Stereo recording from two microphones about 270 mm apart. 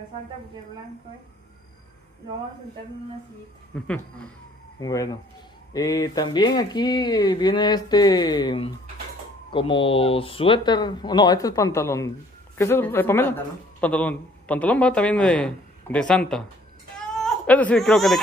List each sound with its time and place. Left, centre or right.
3.7 s a man's voice: centre